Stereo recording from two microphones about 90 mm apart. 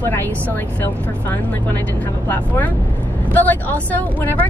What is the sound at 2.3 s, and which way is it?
A woman's voice, 20° left (ahead or behind).